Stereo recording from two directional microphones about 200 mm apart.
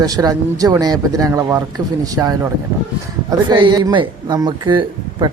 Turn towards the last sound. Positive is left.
turn(degrees=-20)  # may be behind; listen again after turning